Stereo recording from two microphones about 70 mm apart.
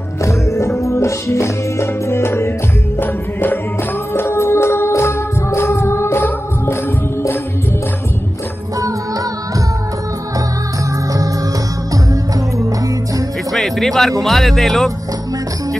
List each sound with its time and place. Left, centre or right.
0.2 s music: left
11.9 s music: right
13.5 s music: centre
14.2 s speech: centre